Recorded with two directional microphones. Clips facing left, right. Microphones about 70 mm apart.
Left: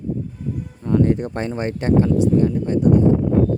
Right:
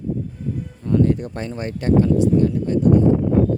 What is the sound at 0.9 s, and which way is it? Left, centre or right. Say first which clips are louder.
Speech: left 1 dB; left.